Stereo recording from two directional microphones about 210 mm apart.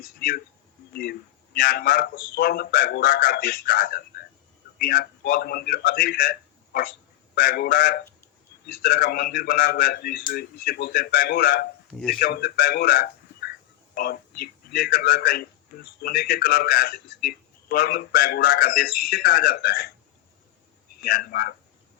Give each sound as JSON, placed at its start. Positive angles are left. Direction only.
{"t": 1.5, "sound": "speech", "side_deg": 50}
{"t": 7.3, "sound": "speech", "side_deg": 50}
{"t": 11.9, "sound": "speech", "side_deg": 5}
{"t": 12.2, "sound": "speech", "side_deg": 45}
{"t": 21.0, "sound": "speech", "side_deg": 45}